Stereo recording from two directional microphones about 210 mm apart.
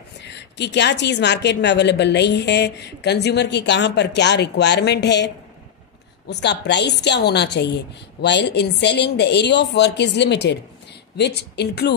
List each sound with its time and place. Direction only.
0.2 s a woman's voice: 55° left (ahead or behind)